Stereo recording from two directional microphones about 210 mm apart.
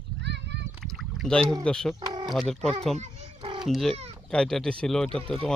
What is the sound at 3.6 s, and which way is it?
Speech, centre (ahead or behind).